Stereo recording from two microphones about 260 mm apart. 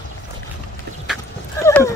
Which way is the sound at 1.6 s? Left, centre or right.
Centre.